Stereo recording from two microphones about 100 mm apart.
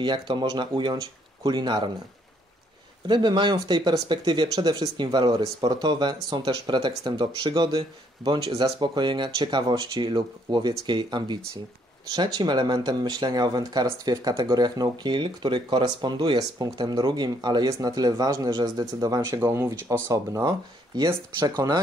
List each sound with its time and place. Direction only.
0.0 s speech: 50° right (ahead or behind)
3.1 s speech: 50° right (ahead or behind)
19.4 s speech: 25° right (ahead or behind); by 21.8 s 45° right (ahead or behind)